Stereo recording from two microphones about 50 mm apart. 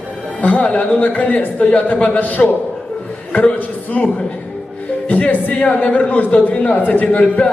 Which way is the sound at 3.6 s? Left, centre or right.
Left.